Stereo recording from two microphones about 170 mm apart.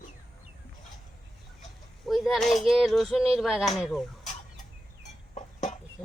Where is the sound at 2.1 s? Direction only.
Centre (ahead or behind).